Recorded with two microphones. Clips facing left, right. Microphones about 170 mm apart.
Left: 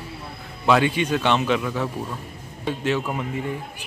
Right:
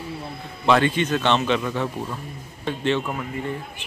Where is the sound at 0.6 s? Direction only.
5° left (ahead or behind).